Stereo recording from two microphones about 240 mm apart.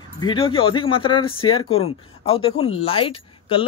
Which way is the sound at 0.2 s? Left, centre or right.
Left.